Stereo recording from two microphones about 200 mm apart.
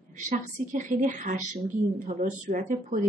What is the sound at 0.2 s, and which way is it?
Speech, 40° right (ahead or behind).